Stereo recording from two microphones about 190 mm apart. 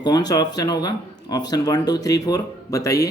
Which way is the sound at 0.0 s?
20° left (ahead or behind).